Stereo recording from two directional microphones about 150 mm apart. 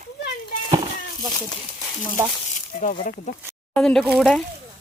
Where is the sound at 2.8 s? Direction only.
60° left (ahead or behind).